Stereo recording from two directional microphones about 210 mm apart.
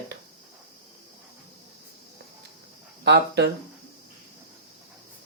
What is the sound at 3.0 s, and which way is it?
Speech, 55° right (ahead or behind).